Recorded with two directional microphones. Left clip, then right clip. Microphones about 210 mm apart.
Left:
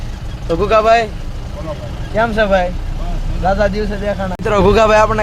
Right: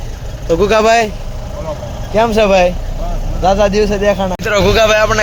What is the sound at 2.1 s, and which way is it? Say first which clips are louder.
Speech: right 3 dB; 20° right (ahead or behind).